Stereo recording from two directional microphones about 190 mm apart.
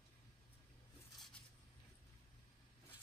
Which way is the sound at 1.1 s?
Centre (ahead or behind).